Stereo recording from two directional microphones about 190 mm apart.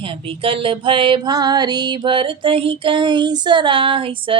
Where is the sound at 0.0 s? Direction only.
30° right (ahead or behind).